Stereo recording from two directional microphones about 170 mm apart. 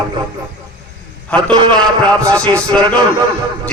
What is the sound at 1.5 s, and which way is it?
Speech, 25° right (ahead or behind).